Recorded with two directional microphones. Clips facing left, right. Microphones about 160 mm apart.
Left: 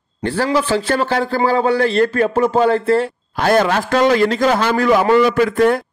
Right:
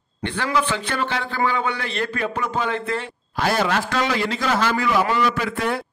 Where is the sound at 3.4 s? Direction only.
50° left (ahead or behind).